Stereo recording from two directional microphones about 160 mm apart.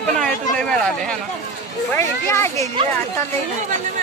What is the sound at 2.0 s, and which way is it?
Speech, 15° left (ahead or behind).